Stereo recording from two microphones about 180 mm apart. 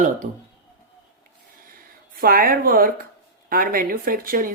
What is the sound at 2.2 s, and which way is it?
Speech, 50° right (ahead or behind).